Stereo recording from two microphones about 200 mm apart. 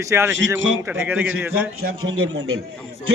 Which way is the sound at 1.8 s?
90° right.